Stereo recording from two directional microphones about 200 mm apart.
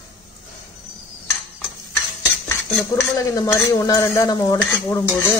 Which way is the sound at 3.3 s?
15° left (ahead or behind).